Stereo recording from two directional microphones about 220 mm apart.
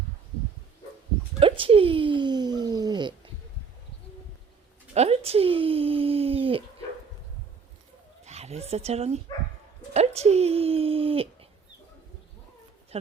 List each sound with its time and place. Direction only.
1.4 s speech: 25° right (ahead or behind)
4.9 s speech: 25° right (ahead or behind)
8.2 s speech: 30° right (ahead or behind)